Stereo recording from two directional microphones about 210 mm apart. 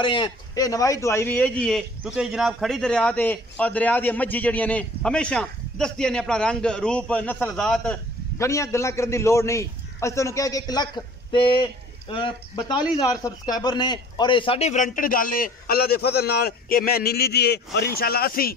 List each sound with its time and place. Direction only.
0.0 s a man's voice: 20° left (ahead or behind); by 18.5 s 45° left (ahead or behind)